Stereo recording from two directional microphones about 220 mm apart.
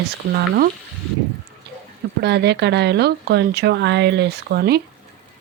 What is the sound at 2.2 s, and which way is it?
Speech, 50° right (ahead or behind).